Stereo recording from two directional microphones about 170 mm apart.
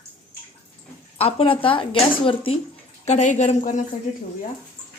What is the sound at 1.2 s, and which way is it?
Speech, 35° left (ahead or behind).